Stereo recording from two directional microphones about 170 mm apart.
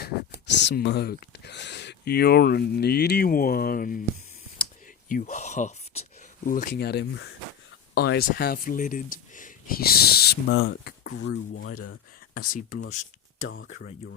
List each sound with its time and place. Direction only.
0.0 s speech: 90° left; by 4.0 s 55° left (ahead or behind)
5.0 s speech: 50° left (ahead or behind)
6.4 s speech: 55° left (ahead or behind); by 11.6 s 75° left (ahead or behind)